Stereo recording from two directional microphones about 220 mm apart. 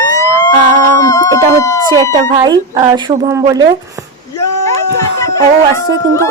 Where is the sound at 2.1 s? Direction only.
20° right (ahead or behind).